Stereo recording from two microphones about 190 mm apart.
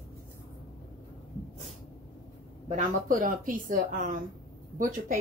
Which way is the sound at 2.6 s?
45° right (ahead or behind).